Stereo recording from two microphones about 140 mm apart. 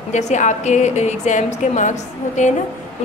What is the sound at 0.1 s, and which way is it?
A woman's voice, 60° left (ahead or behind).